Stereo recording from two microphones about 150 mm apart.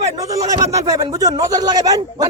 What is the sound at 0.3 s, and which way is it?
Speech, 20° right (ahead or behind).